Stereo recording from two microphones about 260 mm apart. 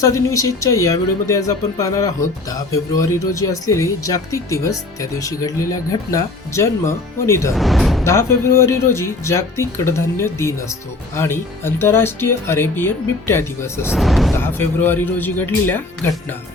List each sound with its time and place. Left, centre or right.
0.0 s speech: centre
7.5 s speech: centre
8.0 s speech: centre